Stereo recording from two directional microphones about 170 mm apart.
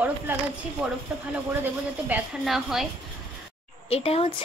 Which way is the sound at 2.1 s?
Centre (ahead or behind).